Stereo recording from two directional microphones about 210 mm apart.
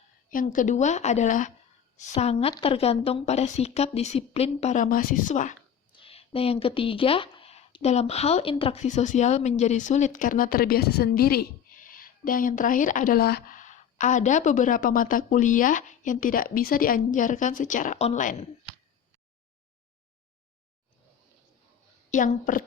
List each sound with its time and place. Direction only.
0.3 s a woman's voice: 40° left (ahead or behind)
5.9 s a woman's voice: 25° left (ahead or behind)
22.1 s a woman's voice: 40° left (ahead or behind)